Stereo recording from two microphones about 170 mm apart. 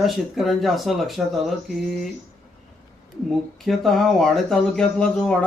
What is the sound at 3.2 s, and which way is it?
Speech, centre (ahead or behind).